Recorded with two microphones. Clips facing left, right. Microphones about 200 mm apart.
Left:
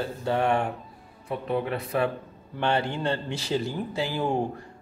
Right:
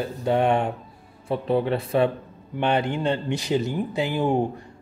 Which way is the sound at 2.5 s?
15° right (ahead or behind).